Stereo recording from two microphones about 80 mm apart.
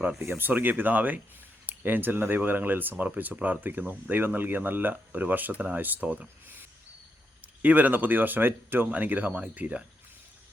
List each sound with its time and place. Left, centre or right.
0.3 s speech: right